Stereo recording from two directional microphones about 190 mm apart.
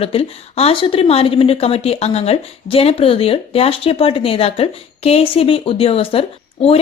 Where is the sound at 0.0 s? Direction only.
30° left (ahead or behind).